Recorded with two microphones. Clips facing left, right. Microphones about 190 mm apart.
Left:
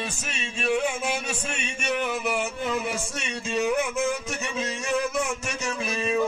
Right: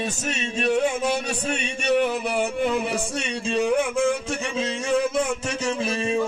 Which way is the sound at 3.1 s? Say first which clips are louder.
Right 3 dB; 30° right (ahead or behind).